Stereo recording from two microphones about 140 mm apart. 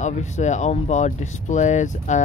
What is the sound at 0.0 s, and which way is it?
Speech, 55° left (ahead or behind).